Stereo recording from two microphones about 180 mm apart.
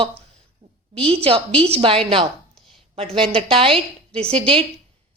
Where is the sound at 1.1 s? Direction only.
35° right (ahead or behind).